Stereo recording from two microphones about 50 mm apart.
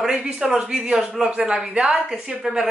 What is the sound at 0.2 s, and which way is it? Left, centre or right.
Speech, centre.